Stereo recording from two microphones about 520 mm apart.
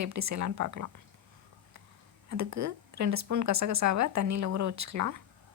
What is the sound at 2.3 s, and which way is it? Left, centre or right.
Speech, right.